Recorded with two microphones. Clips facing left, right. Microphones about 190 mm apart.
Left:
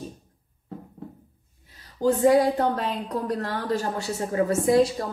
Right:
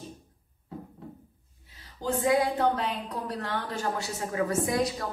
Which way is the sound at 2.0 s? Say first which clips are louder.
Left 7 dB; 40° left (ahead or behind).